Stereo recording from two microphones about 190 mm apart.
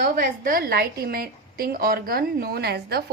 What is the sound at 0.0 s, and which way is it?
A woman's voice, 50° right (ahead or behind).